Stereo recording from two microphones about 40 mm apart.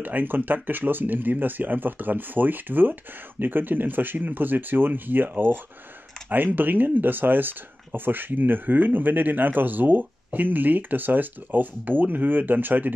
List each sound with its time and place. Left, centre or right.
0.0 s speech: right